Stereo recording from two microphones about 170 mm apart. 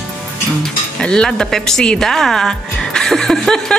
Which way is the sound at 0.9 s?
5° left (ahead or behind).